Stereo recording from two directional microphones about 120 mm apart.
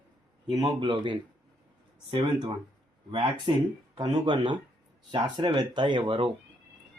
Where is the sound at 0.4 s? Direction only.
35° right (ahead or behind).